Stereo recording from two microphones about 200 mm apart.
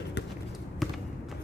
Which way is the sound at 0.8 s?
Centre (ahead or behind).